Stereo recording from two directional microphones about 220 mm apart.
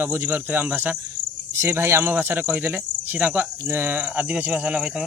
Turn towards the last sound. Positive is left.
turn(degrees=-5)  # may be behind; listen again after turning